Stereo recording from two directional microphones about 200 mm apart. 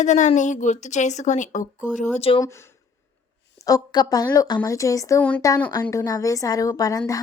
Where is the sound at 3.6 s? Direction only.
20° left (ahead or behind).